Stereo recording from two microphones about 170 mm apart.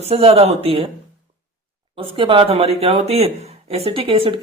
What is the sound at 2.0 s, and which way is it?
Speech, 30° right (ahead or behind).